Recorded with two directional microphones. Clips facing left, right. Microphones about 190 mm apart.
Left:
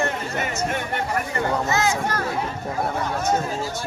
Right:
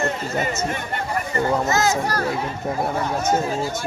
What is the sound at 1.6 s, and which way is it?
Speech, 40° right (ahead or behind).